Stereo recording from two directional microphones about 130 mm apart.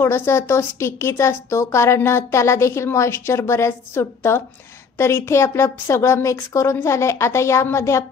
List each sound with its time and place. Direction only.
0.0 s a woman's voice: 20° left (ahead or behind)